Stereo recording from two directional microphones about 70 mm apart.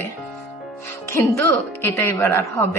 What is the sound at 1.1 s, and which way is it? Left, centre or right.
A woman's voice, left.